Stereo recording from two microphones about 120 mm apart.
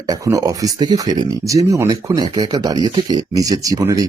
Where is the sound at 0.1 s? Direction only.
30° right (ahead or behind).